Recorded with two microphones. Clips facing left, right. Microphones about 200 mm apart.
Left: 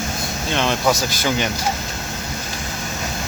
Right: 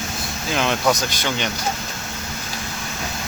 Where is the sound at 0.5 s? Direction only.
Centre (ahead or behind).